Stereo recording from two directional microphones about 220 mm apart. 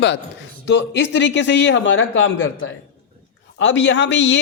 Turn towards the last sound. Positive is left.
turn(degrees=55)  # may be behind; listen again after turning